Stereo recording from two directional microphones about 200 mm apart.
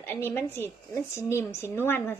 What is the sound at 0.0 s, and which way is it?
A woman's voice, 10° left (ahead or behind).